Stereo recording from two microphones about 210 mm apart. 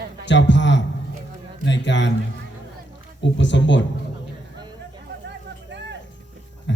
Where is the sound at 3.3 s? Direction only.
60° left (ahead or behind).